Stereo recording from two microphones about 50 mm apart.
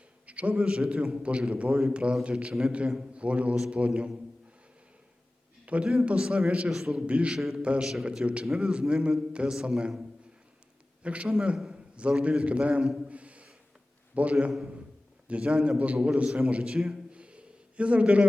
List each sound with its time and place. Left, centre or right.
0.3 s a man's voice: right
5.6 s a man's voice: right
6.7 s a man's voice: centre
6.9 s a man's voice: right
7.3 s a man's voice: centre
7.6 s a man's voice: right
11.0 s a man's voice: right
12.8 s a man's voice: centre
13.1 s a sound: right
14.2 s a man's voice: right
17.1 s a sound: right